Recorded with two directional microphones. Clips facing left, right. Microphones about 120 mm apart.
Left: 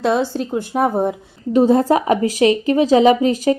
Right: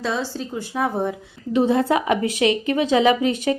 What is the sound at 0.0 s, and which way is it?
A woman's voice, 60° left (ahead or behind).